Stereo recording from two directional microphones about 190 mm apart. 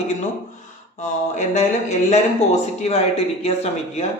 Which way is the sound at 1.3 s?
40° left (ahead or behind).